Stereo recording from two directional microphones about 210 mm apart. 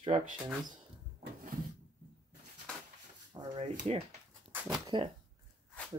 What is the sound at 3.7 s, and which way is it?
Speech, 30° right (ahead or behind).